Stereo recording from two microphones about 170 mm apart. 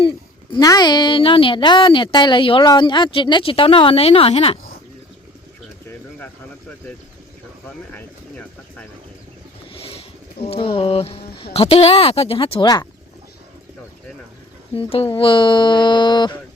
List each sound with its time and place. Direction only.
0.5 s a woman's voice: 25° left (ahead or behind)
6.1 s speech: 10° left (ahead or behind)
9.8 s speech: 35° left (ahead or behind)
12.6 s a woman's voice: 20° left (ahead or behind)
14.8 s a woman's voice: 35° left (ahead or behind)